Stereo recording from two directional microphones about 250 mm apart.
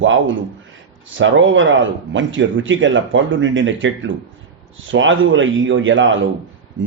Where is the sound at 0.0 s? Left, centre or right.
Right.